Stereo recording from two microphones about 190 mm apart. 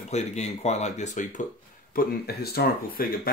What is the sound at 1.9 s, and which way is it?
Speech, 50° left (ahead or behind).